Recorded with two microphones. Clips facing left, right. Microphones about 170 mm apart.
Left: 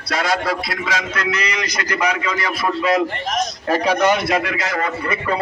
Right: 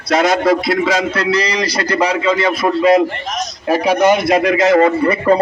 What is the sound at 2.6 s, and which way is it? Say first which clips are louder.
Speech: right 6 dB; 35° right (ahead or behind).